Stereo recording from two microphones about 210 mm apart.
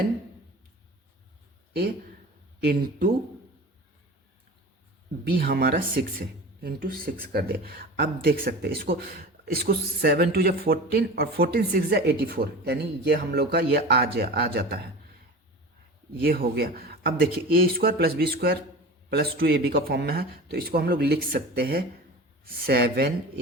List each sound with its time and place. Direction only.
1.7 s speech: 45° right (ahead or behind)
5.4 s speech: 45° right (ahead or behind)
16.2 s speech: 45° right (ahead or behind)